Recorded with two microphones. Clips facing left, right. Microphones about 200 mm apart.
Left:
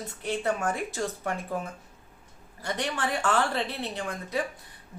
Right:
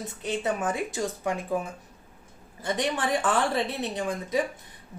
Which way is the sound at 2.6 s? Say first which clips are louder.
Right 3 dB; 15° right (ahead or behind).